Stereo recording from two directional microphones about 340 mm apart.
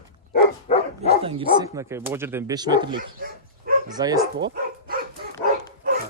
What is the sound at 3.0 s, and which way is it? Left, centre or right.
Dog, right.